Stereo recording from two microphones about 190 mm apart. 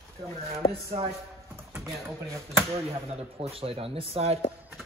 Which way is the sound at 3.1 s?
30° right (ahead or behind).